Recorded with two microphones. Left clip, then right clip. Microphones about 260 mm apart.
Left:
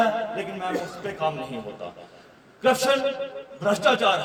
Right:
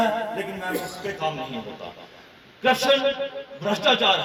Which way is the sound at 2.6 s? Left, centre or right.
Left.